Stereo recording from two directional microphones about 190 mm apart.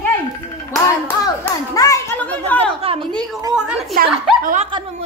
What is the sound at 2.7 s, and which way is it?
Speech, 30° right (ahead or behind).